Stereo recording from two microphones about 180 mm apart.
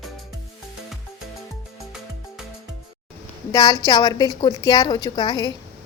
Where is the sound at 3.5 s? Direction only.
20° left (ahead or behind).